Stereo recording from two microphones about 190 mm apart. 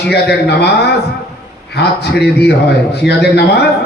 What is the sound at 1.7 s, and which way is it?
A man's voice, 60° left (ahead or behind).